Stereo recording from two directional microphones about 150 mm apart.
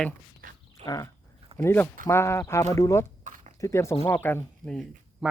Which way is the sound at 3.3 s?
60° right (ahead or behind).